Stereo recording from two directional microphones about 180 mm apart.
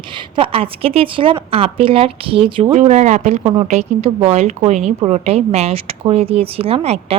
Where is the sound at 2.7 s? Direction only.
40° right (ahead or behind).